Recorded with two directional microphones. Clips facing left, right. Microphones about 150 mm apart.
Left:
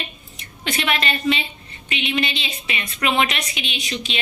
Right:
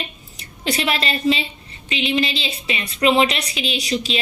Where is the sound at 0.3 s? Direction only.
35° right (ahead or behind).